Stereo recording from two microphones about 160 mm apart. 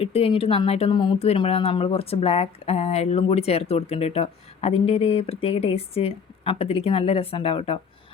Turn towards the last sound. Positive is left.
turn(degrees=35)  # may be behind; listen again after turning